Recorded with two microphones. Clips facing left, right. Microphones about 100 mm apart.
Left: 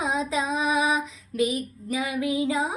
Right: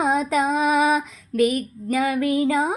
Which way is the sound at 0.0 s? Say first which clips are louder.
Right 6 dB; 55° right (ahead or behind).